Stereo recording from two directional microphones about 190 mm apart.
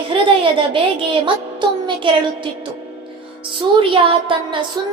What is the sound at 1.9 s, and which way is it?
A woman's voice, 25° right (ahead or behind).